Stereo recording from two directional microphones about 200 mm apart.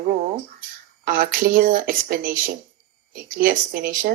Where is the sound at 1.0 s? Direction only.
45° right (ahead or behind).